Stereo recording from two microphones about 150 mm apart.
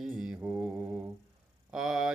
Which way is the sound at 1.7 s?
5° right (ahead or behind).